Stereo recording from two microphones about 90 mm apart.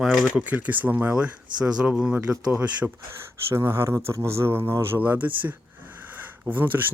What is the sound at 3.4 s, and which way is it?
Speech, 30° right (ahead or behind).